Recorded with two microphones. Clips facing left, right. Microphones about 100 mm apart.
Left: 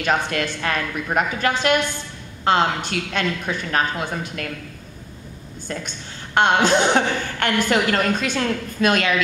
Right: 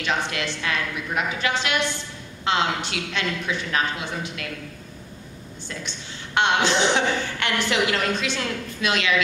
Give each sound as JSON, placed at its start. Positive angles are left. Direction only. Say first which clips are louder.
{"t": 0.0, "sound": "a woman's voice", "louder": "left 4 dB", "side_deg": 45}
{"t": 5.7, "sound": "a woman's voice", "louder": "left 5 dB", "side_deg": 45}